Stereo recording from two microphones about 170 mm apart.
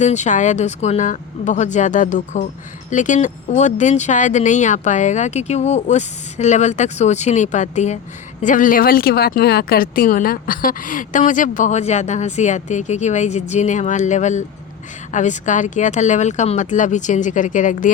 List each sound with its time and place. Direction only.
0.0 s speech: 45° left (ahead or behind)